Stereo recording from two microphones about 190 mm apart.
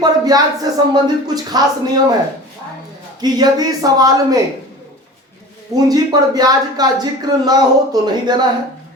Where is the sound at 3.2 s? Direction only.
20° right (ahead or behind).